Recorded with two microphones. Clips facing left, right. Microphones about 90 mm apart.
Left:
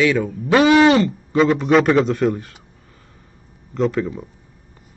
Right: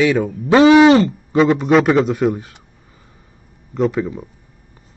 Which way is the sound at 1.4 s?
Centre (ahead or behind).